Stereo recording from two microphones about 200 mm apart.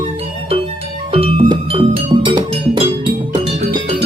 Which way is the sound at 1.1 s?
30° right (ahead or behind).